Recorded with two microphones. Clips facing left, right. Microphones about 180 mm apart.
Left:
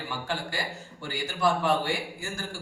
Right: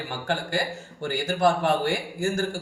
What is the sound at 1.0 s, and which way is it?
Speech, 50° right (ahead or behind).